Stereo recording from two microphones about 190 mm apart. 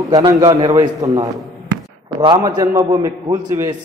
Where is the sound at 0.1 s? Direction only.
20° right (ahead or behind).